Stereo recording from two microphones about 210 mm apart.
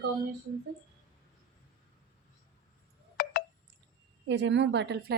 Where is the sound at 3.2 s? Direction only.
40° left (ahead or behind).